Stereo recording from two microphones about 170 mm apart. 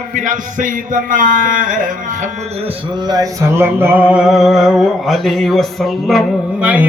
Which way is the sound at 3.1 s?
20° right (ahead or behind).